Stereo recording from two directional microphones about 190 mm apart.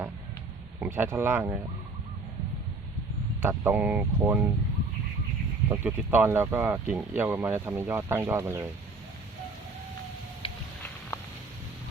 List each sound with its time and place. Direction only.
0.8 s speech: 10° right (ahead or behind)
3.4 s speech: 10° right (ahead or behind)
5.6 s speech: 10° right (ahead or behind)
10.4 s a sound: 30° left (ahead or behind)